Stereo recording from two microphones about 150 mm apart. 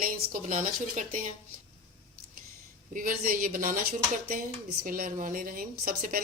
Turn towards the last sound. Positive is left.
turn(degrees=-75)  # may be behind; listen again after turning